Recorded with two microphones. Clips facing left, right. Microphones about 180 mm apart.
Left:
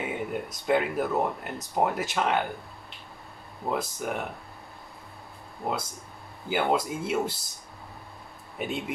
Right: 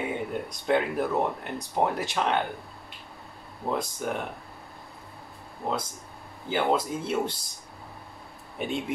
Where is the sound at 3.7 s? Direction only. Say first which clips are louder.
Even; 5° left (ahead or behind).